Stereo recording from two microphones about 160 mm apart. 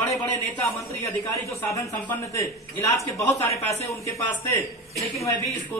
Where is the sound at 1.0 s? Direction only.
20° left (ahead or behind).